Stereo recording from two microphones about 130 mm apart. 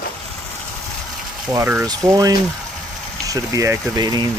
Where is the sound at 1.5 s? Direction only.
20° right (ahead or behind).